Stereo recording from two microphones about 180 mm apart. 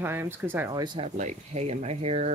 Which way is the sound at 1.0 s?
40° right (ahead or behind).